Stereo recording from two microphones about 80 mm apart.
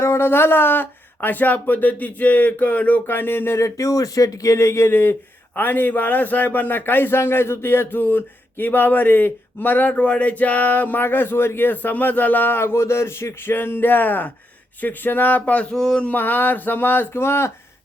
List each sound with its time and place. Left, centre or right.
0.0 s a man's voice: left
15.7 s speech: centre
16.0 s a man's voice: left